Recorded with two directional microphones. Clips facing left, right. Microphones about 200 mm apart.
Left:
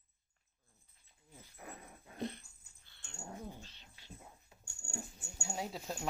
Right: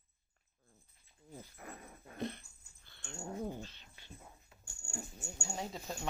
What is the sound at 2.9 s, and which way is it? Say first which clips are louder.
Dog: right 9 dB; 55° right (ahead or behind).